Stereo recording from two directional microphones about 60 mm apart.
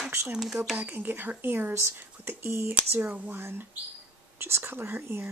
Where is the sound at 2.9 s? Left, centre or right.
Right.